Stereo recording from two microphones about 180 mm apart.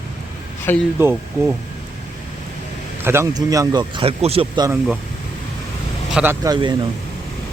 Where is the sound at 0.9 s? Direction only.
15° right (ahead or behind).